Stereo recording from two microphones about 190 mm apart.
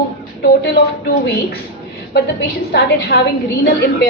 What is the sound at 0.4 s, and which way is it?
Speech, 60° left (ahead or behind).